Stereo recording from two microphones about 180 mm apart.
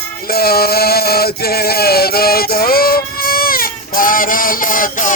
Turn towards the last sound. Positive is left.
turn(degrees=50)  # may be behind; listen again after turning